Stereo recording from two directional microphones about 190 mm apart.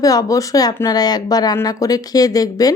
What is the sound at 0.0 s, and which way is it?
Speech, 20° left (ahead or behind).